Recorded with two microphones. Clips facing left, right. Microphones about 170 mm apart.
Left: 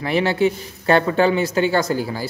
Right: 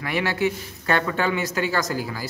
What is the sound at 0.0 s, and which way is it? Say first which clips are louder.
A man's voice: left 5 dB; 30° left (ahead or behind).